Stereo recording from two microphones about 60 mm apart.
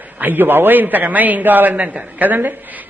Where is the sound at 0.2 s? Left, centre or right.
Right.